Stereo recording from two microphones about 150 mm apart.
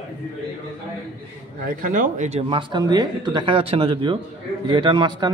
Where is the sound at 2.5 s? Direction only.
30° right (ahead or behind).